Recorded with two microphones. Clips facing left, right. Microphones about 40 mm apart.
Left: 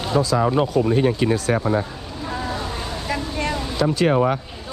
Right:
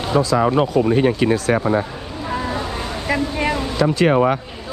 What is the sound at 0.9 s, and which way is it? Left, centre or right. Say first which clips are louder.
Speech: right 3 dB; right.